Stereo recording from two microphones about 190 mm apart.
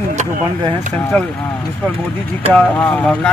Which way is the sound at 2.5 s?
10° left (ahead or behind).